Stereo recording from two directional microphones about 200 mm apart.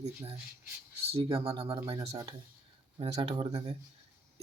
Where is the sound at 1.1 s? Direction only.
30° right (ahead or behind).